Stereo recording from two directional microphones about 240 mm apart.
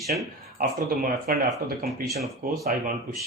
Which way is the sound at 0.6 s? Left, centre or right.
Right.